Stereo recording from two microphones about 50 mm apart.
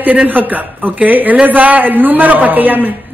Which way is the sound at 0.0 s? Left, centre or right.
Right.